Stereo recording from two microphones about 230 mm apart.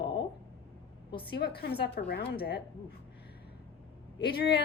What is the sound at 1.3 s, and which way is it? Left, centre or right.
A woman's voice, left.